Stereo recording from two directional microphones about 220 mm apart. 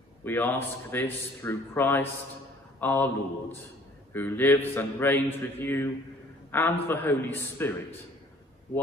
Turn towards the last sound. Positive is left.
turn(degrees=10)  # may be behind; listen again after turning